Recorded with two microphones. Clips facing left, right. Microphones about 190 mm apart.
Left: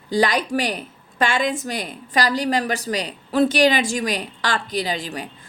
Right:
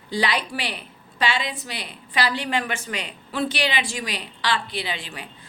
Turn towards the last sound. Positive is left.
turn(degrees=40)  # may be behind; listen again after turning